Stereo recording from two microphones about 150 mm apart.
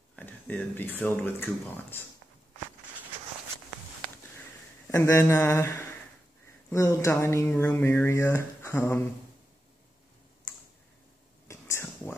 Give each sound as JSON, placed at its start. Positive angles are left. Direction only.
{"t": 0.1, "sound": "speech", "side_deg": 10}
{"t": 4.8, "sound": "speech", "side_deg": 20}
{"t": 11.4, "sound": "whispering", "side_deg": 20}